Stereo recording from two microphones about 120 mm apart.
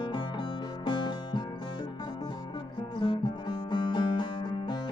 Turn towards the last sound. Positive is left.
turn(degrees=40)  # may be behind; listen again after turning